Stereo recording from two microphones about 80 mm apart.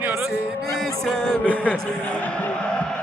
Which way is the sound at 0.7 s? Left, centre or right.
Centre.